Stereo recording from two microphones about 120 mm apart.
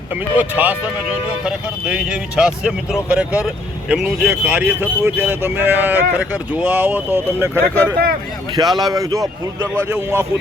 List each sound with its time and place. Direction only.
0.3 s speech: 15° right (ahead or behind)
8.5 s speech: 35° right (ahead or behind)